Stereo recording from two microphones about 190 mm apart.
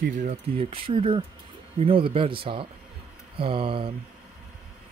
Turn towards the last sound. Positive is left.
turn(degrees=-30)  # may be behind; listen again after turning